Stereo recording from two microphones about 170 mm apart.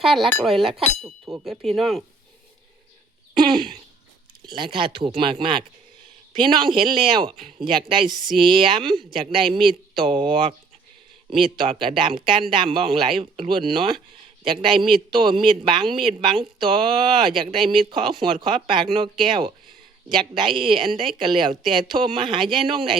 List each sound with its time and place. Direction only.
0.0 s speech: centre (ahead or behind)
0.6 s speech: 30° right (ahead or behind)
1.0 s speech: centre (ahead or behind)
3.3 s a man's voice: 25° right (ahead or behind)